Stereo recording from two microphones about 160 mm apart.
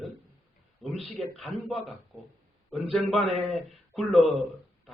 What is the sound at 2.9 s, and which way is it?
Speech, 5° left (ahead or behind).